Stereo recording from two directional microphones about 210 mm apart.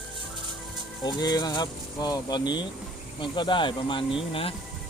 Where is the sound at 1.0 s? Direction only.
20° left (ahead or behind).